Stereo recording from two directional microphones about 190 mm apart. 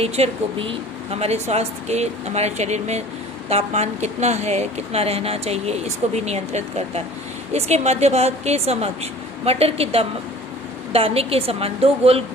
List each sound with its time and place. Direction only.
0.0 s speech: 30° right (ahead or behind)